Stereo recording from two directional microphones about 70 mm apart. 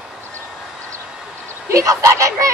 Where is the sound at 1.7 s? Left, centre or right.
Right.